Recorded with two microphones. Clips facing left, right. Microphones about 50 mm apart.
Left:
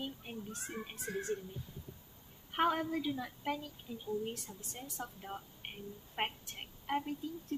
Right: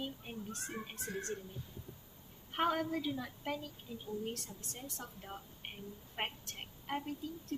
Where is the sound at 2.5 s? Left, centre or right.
Centre.